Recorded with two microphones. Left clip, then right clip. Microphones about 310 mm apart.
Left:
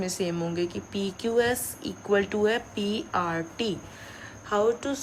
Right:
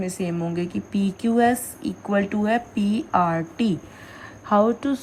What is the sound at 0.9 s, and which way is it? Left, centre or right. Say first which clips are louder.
Speech: right 4 dB; right.